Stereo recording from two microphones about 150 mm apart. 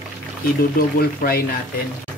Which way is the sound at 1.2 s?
80° left.